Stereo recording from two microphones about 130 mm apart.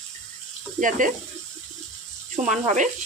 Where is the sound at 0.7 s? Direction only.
90° right.